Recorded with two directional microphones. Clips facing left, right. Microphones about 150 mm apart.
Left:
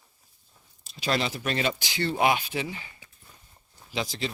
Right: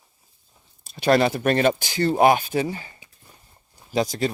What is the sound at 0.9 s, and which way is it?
A man's voice, 55° right (ahead or behind).